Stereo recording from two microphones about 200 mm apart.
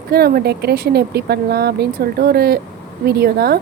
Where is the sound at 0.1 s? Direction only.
50° right (ahead or behind).